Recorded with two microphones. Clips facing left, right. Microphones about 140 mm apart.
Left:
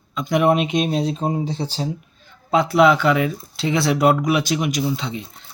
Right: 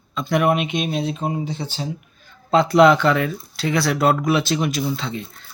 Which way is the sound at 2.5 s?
10° left (ahead or behind).